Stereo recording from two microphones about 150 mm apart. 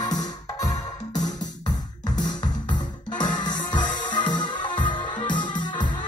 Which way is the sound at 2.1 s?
60° left (ahead or behind).